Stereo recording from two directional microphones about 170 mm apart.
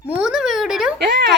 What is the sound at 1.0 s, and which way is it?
Speech, 80° right.